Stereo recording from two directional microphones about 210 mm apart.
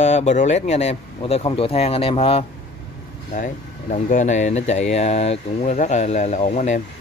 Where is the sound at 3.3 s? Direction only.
40° left (ahead or behind).